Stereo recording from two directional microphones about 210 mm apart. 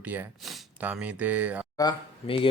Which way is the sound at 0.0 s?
10° right (ahead or behind).